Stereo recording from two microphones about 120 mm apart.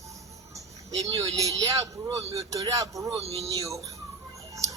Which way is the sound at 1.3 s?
30° right (ahead or behind).